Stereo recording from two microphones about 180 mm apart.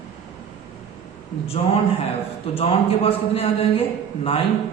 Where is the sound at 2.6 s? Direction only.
30° left (ahead or behind).